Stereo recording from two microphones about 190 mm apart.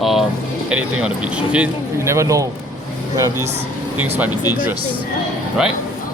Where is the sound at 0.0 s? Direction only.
Centre (ahead or behind).